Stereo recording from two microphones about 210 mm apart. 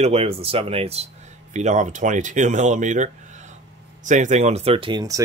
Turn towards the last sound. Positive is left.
turn(degrees=-20)  # may be behind; listen again after turning